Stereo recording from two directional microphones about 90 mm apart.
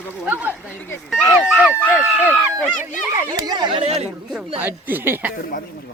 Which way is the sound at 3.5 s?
55° right (ahead or behind).